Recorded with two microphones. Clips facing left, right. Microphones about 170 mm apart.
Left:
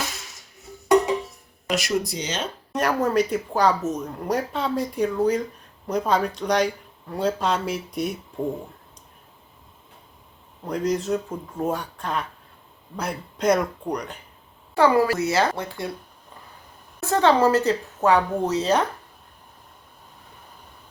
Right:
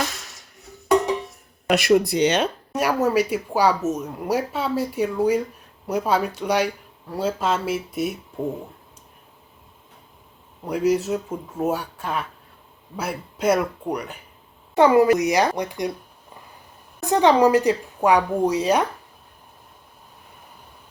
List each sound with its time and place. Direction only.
1.6 s speech: 60° right (ahead or behind)
2.7 s speech: 10° right (ahead or behind)
10.6 s speech: 10° right (ahead or behind)
14.8 s speech: 20° right (ahead or behind)
17.0 s speech: 15° right (ahead or behind)